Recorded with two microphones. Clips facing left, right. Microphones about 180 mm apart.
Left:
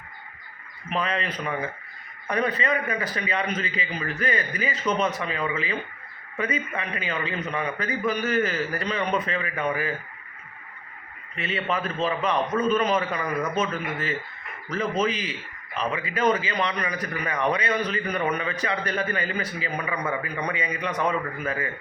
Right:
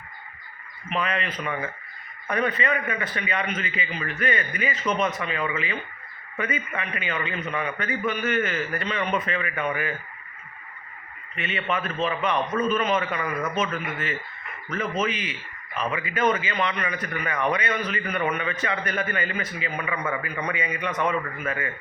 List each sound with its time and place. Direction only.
0.9 s a man's voice: 35° left (ahead or behind)
11.3 s a man's voice: 35° left (ahead or behind)